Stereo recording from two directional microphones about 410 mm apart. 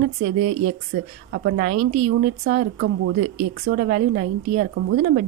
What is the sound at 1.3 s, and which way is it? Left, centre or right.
Speech, right.